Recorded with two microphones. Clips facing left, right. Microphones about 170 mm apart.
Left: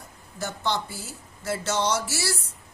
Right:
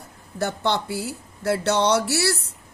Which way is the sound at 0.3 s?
60° right (ahead or behind).